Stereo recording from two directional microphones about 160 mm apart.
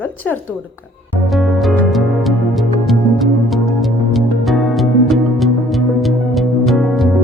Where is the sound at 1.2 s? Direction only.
Centre (ahead or behind).